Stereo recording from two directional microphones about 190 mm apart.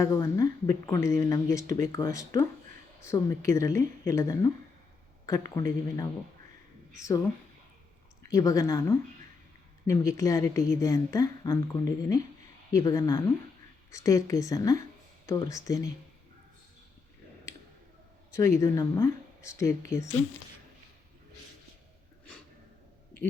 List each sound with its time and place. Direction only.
0.0 s speech: 15° left (ahead or behind)
5.5 s speech: 20° left (ahead or behind)
8.2 s speech: 15° left (ahead or behind)
18.3 s speech: 15° left (ahead or behind)